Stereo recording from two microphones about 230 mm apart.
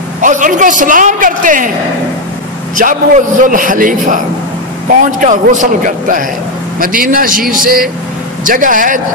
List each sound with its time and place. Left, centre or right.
0.2 s a man's voice: right
2.8 s a man's voice: right